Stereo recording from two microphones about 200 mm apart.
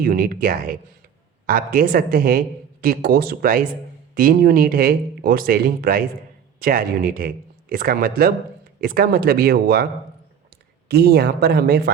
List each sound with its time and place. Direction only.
0.0 s speech: 45° right (ahead or behind)
10.8 s speech: 55° right (ahead or behind)